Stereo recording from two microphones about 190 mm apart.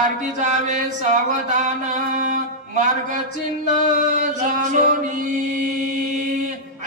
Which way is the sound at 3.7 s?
40° right (ahead or behind).